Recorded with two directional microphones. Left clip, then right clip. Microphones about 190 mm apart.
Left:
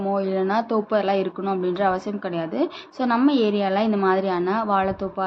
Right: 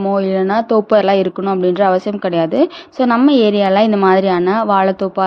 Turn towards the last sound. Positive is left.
turn(degrees=-45)  # may be behind; listen again after turning